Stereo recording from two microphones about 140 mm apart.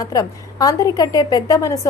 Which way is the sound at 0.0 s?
25° left (ahead or behind).